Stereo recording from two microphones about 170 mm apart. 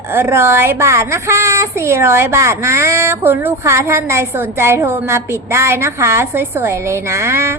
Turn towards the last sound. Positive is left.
turn(degrees=-15)  # may be behind; listen again after turning